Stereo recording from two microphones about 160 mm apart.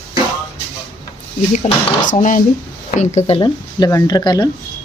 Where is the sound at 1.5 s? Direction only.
45° left (ahead or behind).